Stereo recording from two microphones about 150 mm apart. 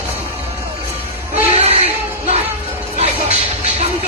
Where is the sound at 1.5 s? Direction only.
40° right (ahead or behind).